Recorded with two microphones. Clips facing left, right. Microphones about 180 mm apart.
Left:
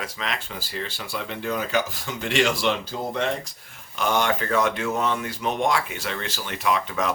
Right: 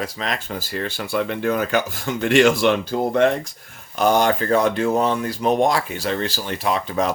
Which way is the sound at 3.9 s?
40° right (ahead or behind).